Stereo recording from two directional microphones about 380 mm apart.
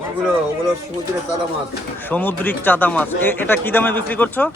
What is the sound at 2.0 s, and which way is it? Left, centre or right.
Speech, centre.